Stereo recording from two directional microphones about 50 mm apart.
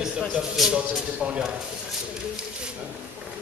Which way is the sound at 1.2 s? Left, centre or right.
Centre.